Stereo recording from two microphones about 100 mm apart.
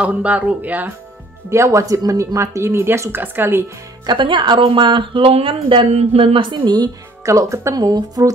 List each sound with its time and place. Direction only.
0.0 s speech: 15° right (ahead or behind)
1.5 s speech: 30° right (ahead or behind)
4.0 s speech: 50° right (ahead or behind)
7.2 s speech: 30° right (ahead or behind)